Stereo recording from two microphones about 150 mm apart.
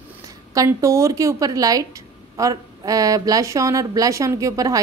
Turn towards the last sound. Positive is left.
turn(degrees=-20)  # may be behind; listen again after turning